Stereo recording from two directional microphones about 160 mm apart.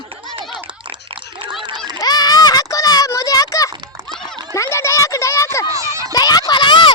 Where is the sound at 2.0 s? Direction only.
25° left (ahead or behind).